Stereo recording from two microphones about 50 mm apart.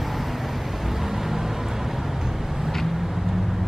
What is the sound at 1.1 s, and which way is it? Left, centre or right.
Vehicle, centre.